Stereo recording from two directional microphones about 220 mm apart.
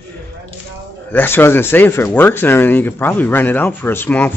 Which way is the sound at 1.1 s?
10° left (ahead or behind).